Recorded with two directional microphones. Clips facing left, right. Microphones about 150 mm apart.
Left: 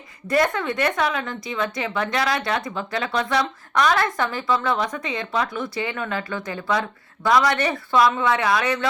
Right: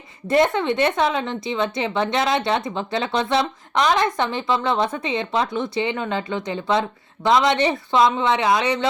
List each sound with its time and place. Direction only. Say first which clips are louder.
0.3 s a woman's voice: right 3 dB; 25° right (ahead or behind)